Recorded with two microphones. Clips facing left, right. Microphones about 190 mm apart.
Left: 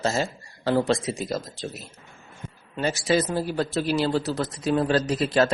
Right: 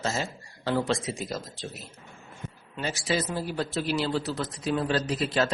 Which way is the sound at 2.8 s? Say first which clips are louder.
Left 6 dB; 45° left (ahead or behind).